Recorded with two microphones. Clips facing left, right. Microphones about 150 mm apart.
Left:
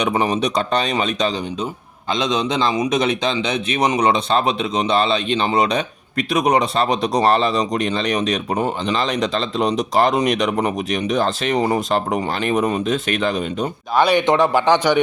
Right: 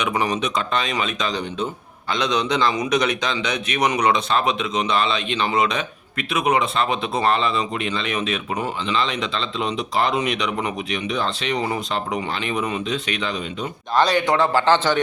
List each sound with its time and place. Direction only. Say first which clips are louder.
0.0 s a man's voice: left 4 dB; 25° left (ahead or behind)
2.1 s a man's voice: left 1 dB; 20° left (ahead or behind); by 13.7 s 45° left (ahead or behind)
13.9 s a man's voice: left 3 dB; 10° left (ahead or behind)